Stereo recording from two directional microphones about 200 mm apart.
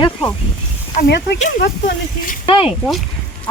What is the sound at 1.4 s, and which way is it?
Speech, 45° left (ahead or behind).